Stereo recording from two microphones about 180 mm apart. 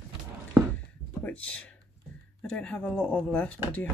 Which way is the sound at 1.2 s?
10° left (ahead or behind).